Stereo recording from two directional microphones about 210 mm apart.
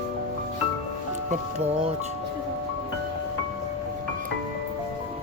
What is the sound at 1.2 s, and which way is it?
Speech, 30° right (ahead or behind).